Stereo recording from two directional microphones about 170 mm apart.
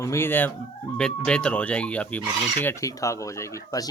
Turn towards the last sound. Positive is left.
turn(degrees=20)  # may be behind; listen again after turning